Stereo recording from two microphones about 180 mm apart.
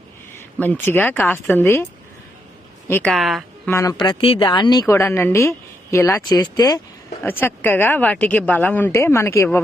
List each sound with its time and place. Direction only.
0.3 s speech: 10° left (ahead or behind)
3.2 s speech: centre (ahead or behind)
3.7 s speech: 20° left (ahead or behind)
7.2 s speech: 10° left (ahead or behind)